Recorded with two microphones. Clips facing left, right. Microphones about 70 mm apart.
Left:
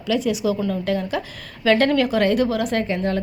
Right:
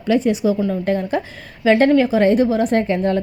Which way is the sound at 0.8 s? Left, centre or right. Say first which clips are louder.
Right 3 dB; right.